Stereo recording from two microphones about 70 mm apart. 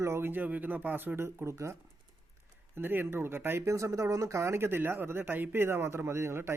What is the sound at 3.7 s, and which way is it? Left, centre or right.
Speech, right.